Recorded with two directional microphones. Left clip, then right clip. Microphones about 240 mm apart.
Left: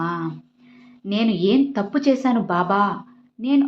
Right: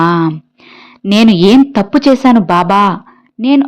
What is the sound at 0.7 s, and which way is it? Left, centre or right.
A woman's voice, right.